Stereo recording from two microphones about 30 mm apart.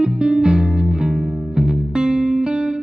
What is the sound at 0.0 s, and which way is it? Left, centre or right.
Music, right.